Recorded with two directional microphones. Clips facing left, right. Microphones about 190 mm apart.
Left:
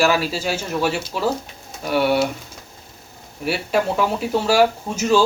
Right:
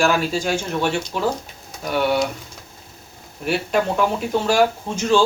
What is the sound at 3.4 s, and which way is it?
Speech, 5° left (ahead or behind).